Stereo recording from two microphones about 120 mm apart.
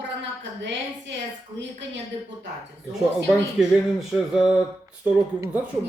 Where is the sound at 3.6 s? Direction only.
5° right (ahead or behind).